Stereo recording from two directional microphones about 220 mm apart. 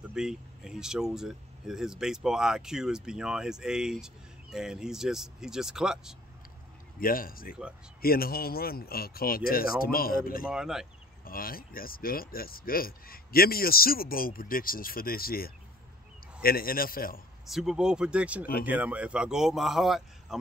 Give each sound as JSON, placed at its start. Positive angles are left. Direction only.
{"t": 0.1, "sound": "speech", "side_deg": -5}
{"t": 7.0, "sound": "speech", "side_deg": 40}
{"t": 10.4, "sound": "speech", "side_deg": -5}
{"t": 11.2, "sound": "speech", "side_deg": 40}
{"t": 17.5, "sound": "speech", "side_deg": 0}